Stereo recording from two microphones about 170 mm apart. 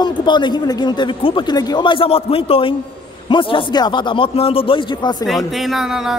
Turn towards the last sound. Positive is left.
turn(degrees=-5)  # may be behind; listen again after turning